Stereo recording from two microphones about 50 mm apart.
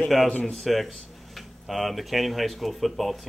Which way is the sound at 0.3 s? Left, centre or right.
Centre.